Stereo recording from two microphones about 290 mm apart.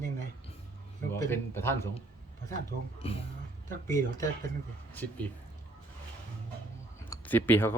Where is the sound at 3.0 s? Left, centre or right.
Centre.